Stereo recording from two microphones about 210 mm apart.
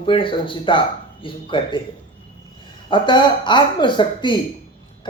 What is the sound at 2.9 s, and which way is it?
Speech, 20° left (ahead or behind).